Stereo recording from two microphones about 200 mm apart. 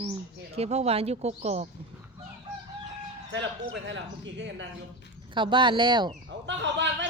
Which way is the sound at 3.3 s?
65° right (ahead or behind).